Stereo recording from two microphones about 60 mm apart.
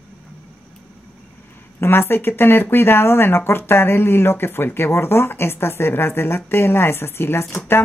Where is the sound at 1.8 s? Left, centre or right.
Left.